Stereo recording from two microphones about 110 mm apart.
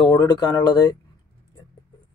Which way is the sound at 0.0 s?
40° left (ahead or behind).